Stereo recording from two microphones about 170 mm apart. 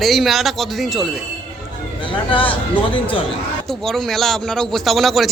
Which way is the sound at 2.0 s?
30° left (ahead or behind).